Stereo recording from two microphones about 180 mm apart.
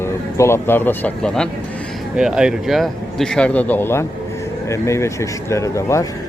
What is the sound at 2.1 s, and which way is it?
Speech, 5° right (ahead or behind).